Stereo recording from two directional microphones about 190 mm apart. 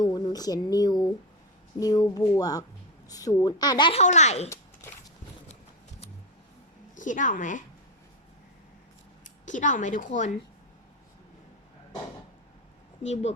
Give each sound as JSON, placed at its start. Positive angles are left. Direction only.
{"t": 0.0, "sound": "a woman's voice", "side_deg": 20}
{"t": 4.0, "sound": "a woman's voice", "side_deg": 35}
{"t": 6.9, "sound": "a woman's voice", "side_deg": 40}
{"t": 9.5, "sound": "a woman's voice", "side_deg": 40}
{"t": 13.0, "sound": "a woman's voice", "side_deg": 35}